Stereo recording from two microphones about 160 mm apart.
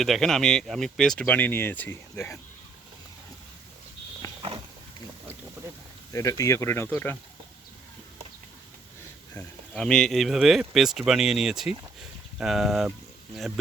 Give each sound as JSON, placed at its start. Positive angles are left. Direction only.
{"t": 0.0, "sound": "speech", "side_deg": 0}
{"t": 6.1, "sound": "speech", "side_deg": 20}
{"t": 9.7, "sound": "speech", "side_deg": 5}